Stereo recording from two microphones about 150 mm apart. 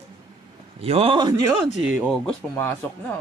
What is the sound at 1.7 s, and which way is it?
Speech, 5° right (ahead or behind).